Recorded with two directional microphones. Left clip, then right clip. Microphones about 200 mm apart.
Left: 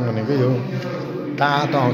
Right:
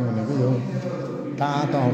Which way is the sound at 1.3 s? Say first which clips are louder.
Left 6 dB; 10° right (ahead or behind).